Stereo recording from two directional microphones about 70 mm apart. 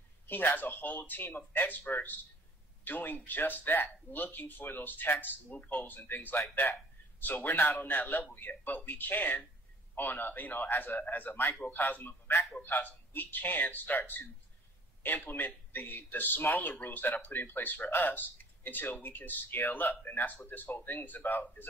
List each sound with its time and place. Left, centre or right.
0.3 s a man's voice: left